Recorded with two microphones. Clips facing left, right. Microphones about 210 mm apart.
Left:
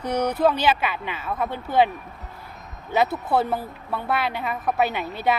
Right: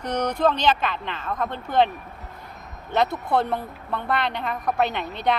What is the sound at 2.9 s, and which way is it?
A woman's voice, 5° left (ahead or behind).